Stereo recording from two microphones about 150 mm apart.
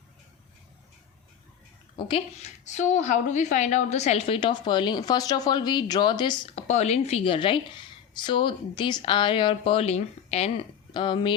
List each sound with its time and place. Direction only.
2.0 s speech: 35° left (ahead or behind)
2.4 s a woman's voice: 50° left (ahead or behind)
4.4 s speech: 30° left (ahead or behind)
6.6 s a woman's voice: 50° left (ahead or behind)